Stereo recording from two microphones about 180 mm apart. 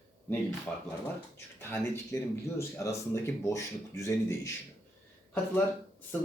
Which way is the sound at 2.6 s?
15° left (ahead or behind).